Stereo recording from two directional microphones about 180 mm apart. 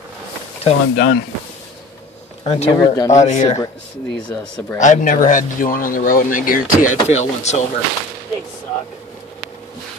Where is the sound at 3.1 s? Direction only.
40° left (ahead or behind).